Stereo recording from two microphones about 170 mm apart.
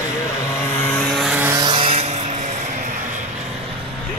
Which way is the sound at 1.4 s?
15° right (ahead or behind).